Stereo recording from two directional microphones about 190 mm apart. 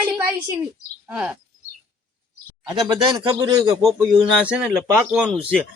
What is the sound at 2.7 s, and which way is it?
Speech, 20° right (ahead or behind).